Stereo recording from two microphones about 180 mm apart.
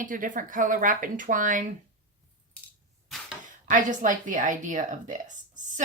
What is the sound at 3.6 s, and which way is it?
A woman's voice, 45° right (ahead or behind).